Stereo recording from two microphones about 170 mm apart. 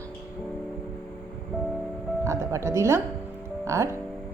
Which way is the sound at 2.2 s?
15° right (ahead or behind).